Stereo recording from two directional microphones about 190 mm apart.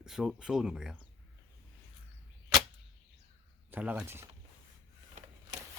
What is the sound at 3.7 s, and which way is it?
Speech, 10° right (ahead or behind).